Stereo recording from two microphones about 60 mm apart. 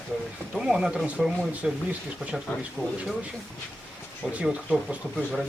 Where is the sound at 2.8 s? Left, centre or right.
Left.